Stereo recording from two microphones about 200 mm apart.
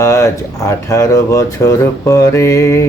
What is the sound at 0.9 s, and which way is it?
Speech, 15° left (ahead or behind).